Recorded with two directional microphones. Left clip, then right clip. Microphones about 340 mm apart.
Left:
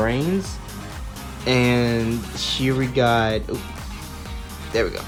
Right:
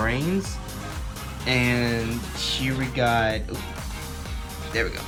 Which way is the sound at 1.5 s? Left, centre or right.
Centre.